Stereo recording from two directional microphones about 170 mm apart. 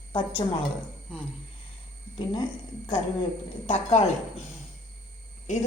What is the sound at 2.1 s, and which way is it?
Speech, 30° left (ahead or behind).